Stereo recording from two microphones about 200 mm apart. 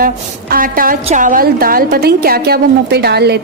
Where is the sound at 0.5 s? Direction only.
45° right (ahead or behind).